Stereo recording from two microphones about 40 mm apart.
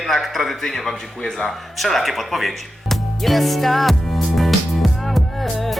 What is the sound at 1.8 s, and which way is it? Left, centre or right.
Speech, centre.